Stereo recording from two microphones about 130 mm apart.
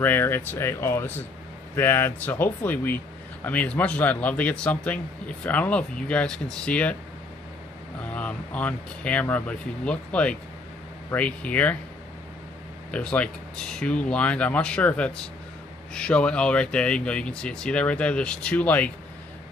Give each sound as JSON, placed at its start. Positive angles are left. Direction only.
{"t": 0.0, "sound": "a man's voice", "side_deg": 15}
{"t": 8.0, "sound": "a man's voice", "side_deg": 10}
{"t": 12.9, "sound": "a man's voice", "side_deg": 10}